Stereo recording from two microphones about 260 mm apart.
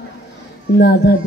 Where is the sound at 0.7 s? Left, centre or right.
Left.